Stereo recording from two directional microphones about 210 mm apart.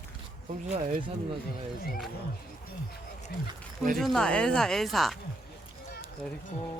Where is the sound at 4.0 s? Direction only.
Centre (ahead or behind).